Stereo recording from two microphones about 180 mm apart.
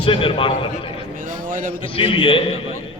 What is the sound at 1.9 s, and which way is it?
Speech, 30° left (ahead or behind).